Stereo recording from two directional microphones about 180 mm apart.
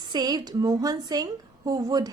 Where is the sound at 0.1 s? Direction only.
20° right (ahead or behind).